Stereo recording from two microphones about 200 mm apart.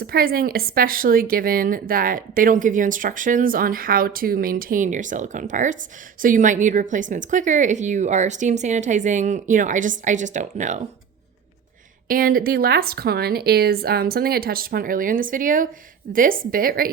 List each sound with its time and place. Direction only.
0.0 s a woman's voice: 50° right (ahead or behind)
12.0 s a woman's voice: 45° right (ahead or behind)